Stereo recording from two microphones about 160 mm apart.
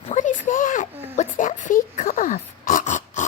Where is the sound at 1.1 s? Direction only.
50° left (ahead or behind).